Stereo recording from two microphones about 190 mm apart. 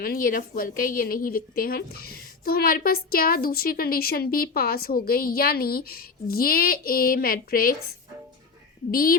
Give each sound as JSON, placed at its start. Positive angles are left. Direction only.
{"t": 0.0, "sound": "a woman's voice", "side_deg": 50}